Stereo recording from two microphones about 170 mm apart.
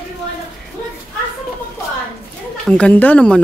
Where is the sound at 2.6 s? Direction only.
5° left (ahead or behind).